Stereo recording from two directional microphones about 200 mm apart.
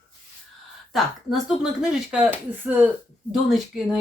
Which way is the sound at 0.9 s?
Centre (ahead or behind).